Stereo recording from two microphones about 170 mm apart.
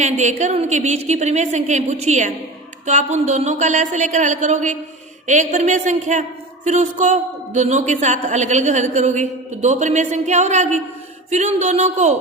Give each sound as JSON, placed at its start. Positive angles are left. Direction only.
{"t": 0.0, "sound": "a woman's voice", "side_deg": -45}